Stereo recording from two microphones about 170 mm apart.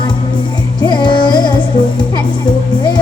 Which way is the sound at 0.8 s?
25° left (ahead or behind).